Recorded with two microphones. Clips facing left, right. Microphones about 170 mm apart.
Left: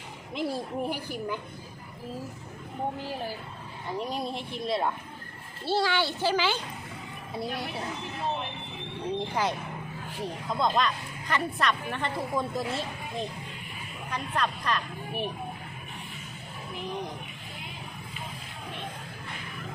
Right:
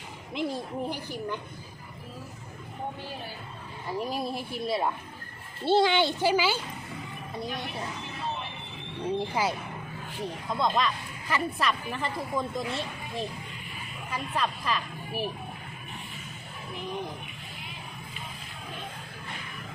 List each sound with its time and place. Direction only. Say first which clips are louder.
0.3 s a woman's voice: left 1 dB; 10° left (ahead or behind)
3.9 s speech: right 1 dB; centre (ahead or behind)
5.6 s a woman's voice: right 4 dB; 20° right (ahead or behind)
9.1 s a woman's voice: even; 5° right (ahead or behind)